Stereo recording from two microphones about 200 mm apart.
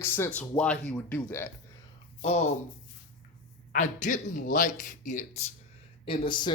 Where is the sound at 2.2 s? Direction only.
35° left (ahead or behind).